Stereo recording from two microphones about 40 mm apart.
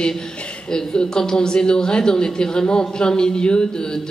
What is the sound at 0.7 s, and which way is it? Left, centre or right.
Speech, centre.